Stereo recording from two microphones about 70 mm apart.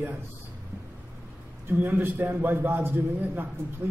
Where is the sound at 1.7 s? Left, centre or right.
Right.